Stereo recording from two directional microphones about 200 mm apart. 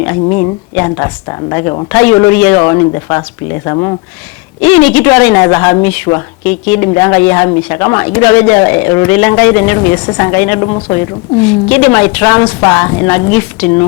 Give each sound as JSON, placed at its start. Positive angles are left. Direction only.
{"t": 0.3, "sound": "speech", "side_deg": 15}
{"t": 10.9, "sound": "speech", "side_deg": 10}